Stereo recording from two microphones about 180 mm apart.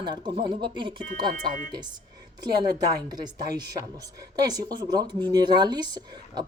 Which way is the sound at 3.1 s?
25° right (ahead or behind).